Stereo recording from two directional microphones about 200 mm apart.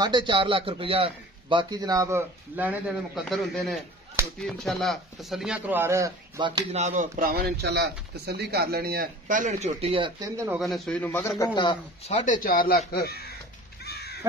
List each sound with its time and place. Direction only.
0.0 s a man's voice: 25° right (ahead or behind)
3.3 s a man's voice: centre (ahead or behind); by 6.6 s 20° right (ahead or behind)
6.7 s speech: 35° right (ahead or behind); by 10.6 s 15° right (ahead or behind)
10.6 s a man's voice: 5° left (ahead or behind); by 12.1 s 25° left (ahead or behind)
12.1 s speech: 40° left (ahead or behind)
13.8 s crow: 55° left (ahead or behind)